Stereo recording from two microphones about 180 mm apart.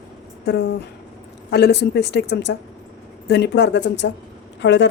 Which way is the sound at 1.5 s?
65° left (ahead or behind).